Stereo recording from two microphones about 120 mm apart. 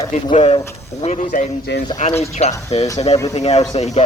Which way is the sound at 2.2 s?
65° left (ahead or behind).